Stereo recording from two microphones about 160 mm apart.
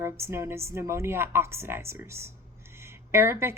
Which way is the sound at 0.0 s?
15° right (ahead or behind).